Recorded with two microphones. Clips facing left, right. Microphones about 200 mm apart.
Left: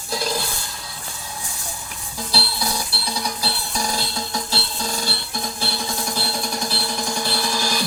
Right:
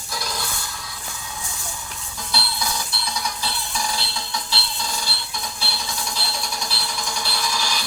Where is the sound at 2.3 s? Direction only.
35° left (ahead or behind).